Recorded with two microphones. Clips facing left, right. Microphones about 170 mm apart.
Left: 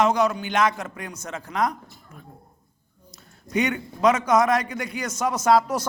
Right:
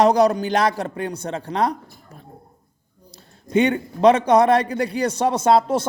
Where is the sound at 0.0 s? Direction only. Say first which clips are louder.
Right 5 dB; 35° right (ahead or behind).